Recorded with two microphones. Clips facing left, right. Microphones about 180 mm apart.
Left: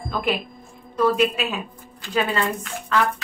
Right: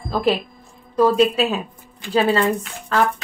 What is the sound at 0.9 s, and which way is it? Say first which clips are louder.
A woman's voice: right 4 dB; 35° right (ahead or behind).